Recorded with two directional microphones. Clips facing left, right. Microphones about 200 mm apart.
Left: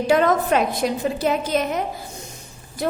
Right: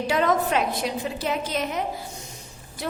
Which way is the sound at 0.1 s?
45° left (ahead or behind).